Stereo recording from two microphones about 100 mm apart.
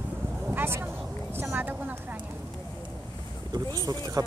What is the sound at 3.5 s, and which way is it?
Speech, 40° right (ahead or behind).